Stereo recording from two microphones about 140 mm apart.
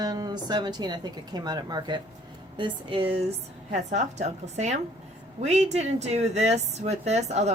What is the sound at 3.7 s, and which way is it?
A woman's voice, 60° right (ahead or behind).